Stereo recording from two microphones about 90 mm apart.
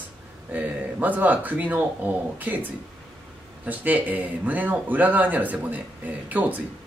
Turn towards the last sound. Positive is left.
turn(degrees=-20)  # may be behind; listen again after turning